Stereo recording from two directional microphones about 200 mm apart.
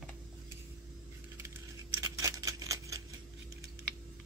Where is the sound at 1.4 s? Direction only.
15° right (ahead or behind).